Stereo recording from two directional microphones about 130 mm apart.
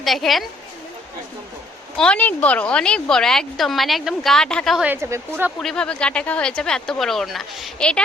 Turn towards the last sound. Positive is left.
turn(degrees=5)  # may be behind; listen again after turning